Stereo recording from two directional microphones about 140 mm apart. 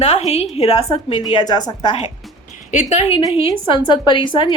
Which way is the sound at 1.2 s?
30° left (ahead or behind).